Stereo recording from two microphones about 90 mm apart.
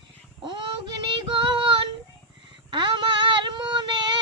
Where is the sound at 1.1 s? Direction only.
65° right (ahead or behind).